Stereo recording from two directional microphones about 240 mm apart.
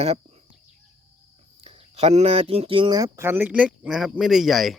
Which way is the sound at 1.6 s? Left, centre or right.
Right.